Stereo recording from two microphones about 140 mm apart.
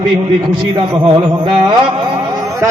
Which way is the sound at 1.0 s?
30° right (ahead or behind).